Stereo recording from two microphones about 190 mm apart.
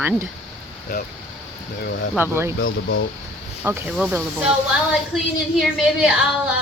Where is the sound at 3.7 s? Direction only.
15° right (ahead or behind).